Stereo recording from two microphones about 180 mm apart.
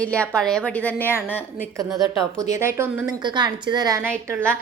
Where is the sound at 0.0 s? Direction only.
5° left (ahead or behind).